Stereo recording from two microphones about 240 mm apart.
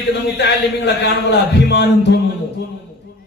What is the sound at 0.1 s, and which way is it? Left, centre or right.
Speech, left.